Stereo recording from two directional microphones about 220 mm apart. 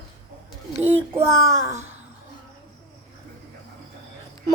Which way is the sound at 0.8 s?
10° right (ahead or behind).